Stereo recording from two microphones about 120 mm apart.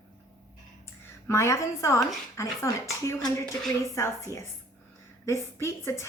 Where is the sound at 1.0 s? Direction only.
25° left (ahead or behind).